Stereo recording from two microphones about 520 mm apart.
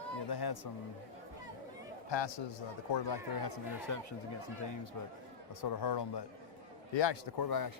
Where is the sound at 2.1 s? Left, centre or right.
Left.